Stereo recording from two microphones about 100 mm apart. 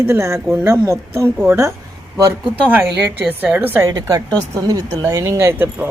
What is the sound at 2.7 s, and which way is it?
A woman's voice, 15° right (ahead or behind).